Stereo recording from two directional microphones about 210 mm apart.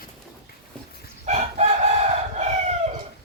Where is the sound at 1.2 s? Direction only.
30° right (ahead or behind).